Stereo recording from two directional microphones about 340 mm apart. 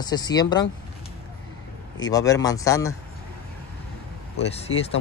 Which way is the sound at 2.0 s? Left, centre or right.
Centre.